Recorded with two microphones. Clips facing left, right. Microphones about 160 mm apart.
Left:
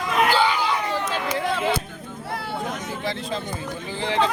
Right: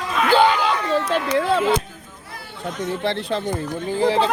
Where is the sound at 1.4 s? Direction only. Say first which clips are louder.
Right 5 dB; 55° right (ahead or behind).